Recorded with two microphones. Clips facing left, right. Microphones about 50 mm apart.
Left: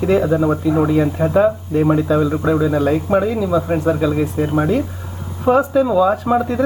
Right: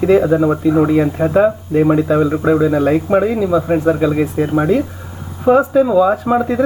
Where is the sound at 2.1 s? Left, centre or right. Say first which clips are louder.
Right 3 dB; right.